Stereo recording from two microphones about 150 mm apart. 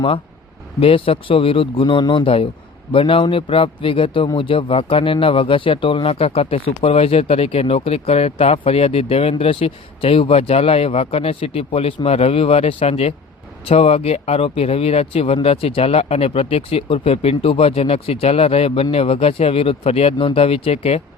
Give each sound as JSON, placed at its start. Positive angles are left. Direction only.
{"t": 0.8, "sound": "speech", "side_deg": 40}